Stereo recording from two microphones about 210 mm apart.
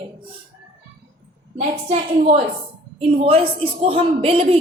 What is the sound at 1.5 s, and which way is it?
A woman's voice, 30° right (ahead or behind).